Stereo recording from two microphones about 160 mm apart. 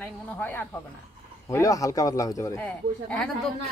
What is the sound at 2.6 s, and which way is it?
Speech, 5° left (ahead or behind).